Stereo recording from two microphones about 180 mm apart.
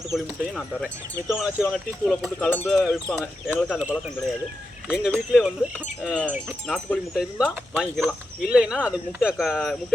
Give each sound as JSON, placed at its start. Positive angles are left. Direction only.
{"t": 0.1, "sound": "speech", "side_deg": 0}
{"t": 1.3, "sound": "speech", "side_deg": -5}
{"t": 4.9, "sound": "speech", "side_deg": -5}